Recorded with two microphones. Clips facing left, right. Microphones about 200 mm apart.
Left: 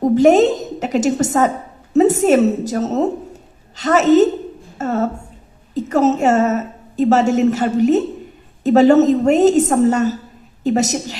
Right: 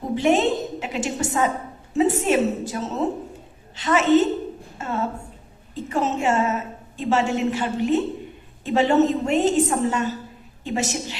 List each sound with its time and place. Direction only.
0.0 s a woman's voice: 40° left (ahead or behind)